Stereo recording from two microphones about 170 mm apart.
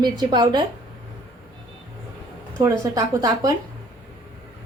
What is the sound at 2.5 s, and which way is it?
Speech, 15° right (ahead or behind).